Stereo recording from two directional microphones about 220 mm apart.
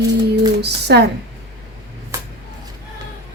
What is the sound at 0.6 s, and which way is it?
Speech, 50° right (ahead or behind).